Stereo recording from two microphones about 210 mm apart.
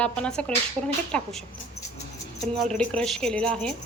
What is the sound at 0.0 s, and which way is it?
Speech, 5° left (ahead or behind).